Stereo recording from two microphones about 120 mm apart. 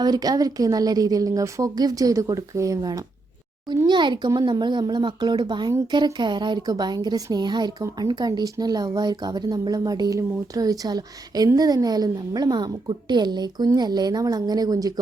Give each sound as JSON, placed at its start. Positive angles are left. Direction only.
{"t": 0.0, "sound": "a woman's voice", "side_deg": -35}
{"t": 3.8, "sound": "a woman's voice", "side_deg": -40}